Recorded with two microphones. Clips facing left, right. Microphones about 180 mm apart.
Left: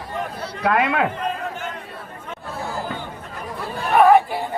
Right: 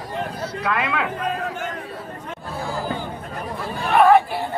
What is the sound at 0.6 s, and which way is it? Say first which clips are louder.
Speech: left 5 dB; 55° left (ahead or behind).